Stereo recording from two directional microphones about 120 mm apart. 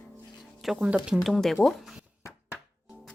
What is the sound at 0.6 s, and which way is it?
Speech, 5° right (ahead or behind).